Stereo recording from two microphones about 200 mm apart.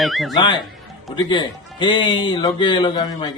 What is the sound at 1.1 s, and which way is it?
A man's voice, 20° left (ahead or behind).